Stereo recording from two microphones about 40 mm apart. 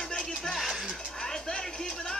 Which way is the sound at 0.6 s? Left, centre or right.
Centre.